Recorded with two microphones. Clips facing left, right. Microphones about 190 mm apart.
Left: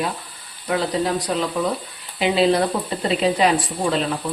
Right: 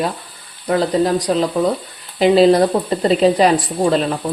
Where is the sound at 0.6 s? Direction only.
40° right (ahead or behind).